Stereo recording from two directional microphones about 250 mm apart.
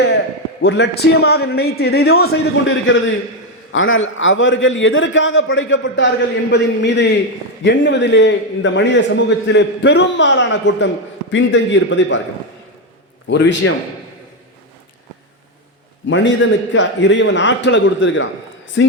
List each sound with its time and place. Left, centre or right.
0.6 s a man's voice: left
13.3 s a man's voice: left
16.0 s a man's voice: left